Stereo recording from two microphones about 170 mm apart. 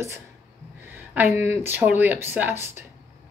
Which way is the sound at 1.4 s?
15° right (ahead or behind).